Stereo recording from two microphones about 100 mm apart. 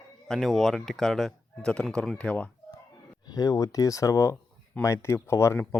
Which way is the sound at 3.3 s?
35° left (ahead or behind).